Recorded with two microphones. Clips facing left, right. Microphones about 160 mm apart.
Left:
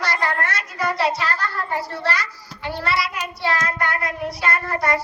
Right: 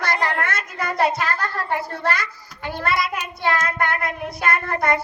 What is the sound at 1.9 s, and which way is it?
Music, 50° right (ahead or behind).